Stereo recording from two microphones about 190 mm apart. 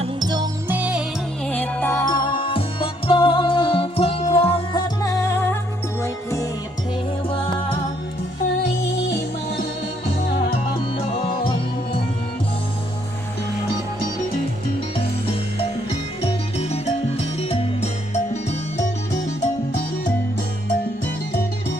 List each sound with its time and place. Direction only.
0.0 s music: 20° right (ahead or behind)
0.7 s music: 5° right (ahead or behind)
1.5 s music: 5° left (ahead or behind)
9.0 s music: 60° left (ahead or behind)
11.3 s music: 25° left (ahead or behind)
16.2 s music: 35° left (ahead or behind)